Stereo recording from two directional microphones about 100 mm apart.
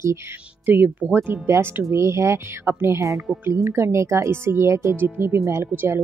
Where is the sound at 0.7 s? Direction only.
20° right (ahead or behind).